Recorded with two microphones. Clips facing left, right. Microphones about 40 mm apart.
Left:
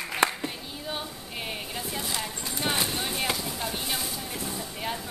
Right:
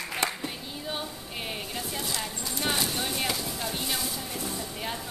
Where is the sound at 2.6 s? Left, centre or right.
Centre.